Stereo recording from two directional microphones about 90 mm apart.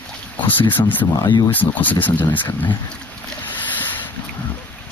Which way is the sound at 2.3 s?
55° left (ahead or behind).